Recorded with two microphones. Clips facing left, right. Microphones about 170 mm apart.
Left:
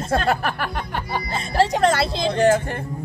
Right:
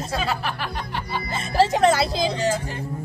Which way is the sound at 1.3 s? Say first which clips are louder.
Even; centre (ahead or behind).